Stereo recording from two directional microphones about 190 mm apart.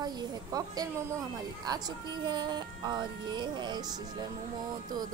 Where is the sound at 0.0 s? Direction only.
20° right (ahead or behind).